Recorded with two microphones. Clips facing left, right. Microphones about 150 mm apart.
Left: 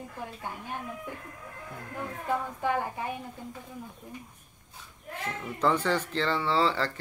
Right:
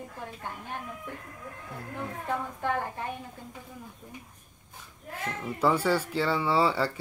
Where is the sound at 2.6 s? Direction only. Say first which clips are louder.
Left 1 dB; 10° left (ahead or behind).